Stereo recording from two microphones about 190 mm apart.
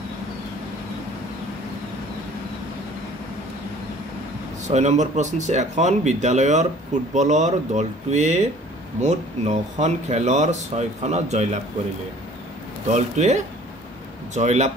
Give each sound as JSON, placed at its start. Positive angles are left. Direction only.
{"t": 4.6, "sound": "speech", "side_deg": -35}
{"t": 12.9, "sound": "speech", "side_deg": -40}